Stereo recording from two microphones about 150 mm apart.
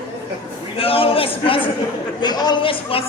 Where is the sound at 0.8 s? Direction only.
40° left (ahead or behind).